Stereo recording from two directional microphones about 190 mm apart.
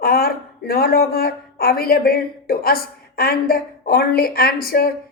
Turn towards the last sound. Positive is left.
turn(degrees=50)  # may be behind; listen again after turning